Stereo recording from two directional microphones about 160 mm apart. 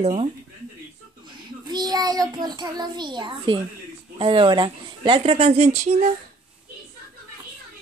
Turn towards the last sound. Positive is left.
turn(degrees=-45)  # may be behind; listen again after turning